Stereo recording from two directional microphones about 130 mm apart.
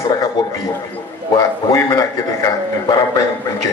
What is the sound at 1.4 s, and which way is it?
A man's voice, 25° left (ahead or behind).